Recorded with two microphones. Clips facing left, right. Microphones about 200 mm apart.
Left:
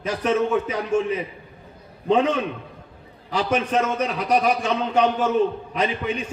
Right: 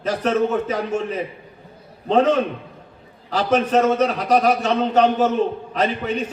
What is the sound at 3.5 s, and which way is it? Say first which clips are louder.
A man's voice: right 6 dB; 40° right (ahead or behind).